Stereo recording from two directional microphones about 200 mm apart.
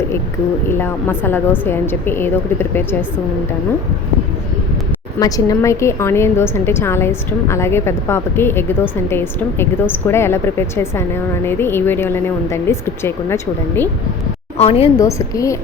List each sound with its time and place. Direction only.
0.7 s a woman's voice: 10° left (ahead or behind)
5.2 s a woman's voice: 15° left (ahead or behind)
14.6 s a woman's voice: 30° left (ahead or behind)
14.9 s a woman's voice: 15° left (ahead or behind)